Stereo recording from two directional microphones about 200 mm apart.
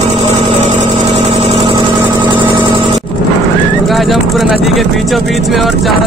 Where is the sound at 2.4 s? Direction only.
25° right (ahead or behind).